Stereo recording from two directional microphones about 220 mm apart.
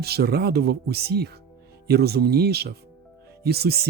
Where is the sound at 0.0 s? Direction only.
45° right (ahead or behind).